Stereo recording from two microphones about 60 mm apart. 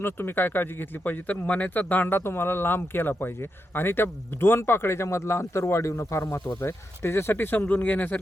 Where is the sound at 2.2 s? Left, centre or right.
Left.